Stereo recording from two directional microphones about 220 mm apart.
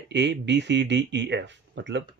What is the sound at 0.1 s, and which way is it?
Speech, 55° right (ahead or behind).